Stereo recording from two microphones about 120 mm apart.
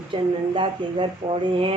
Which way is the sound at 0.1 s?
45° right (ahead or behind).